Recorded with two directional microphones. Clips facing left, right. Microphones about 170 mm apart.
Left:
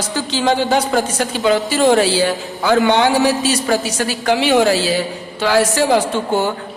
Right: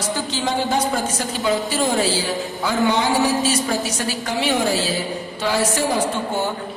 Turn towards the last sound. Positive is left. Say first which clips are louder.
# left 6 dB
turn(degrees=80)